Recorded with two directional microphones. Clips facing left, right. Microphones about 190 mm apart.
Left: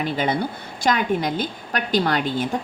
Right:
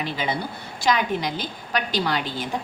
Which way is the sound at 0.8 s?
50° left (ahead or behind).